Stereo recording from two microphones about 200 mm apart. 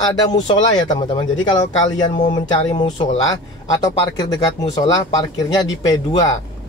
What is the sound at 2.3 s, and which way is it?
Speech, 25° left (ahead or behind).